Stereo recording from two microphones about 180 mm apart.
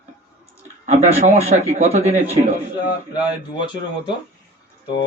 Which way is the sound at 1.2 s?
35° right (ahead or behind).